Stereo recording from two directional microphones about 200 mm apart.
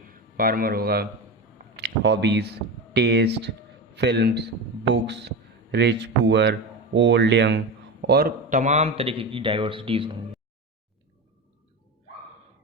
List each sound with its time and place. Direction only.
0.1 s a man's voice: 45° right (ahead or behind); by 10.2 s 25° right (ahead or behind)